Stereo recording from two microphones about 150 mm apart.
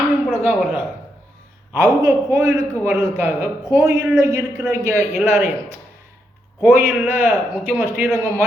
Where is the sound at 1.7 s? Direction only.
20° right (ahead or behind).